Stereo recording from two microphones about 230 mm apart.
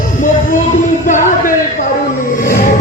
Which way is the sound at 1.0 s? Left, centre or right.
Left.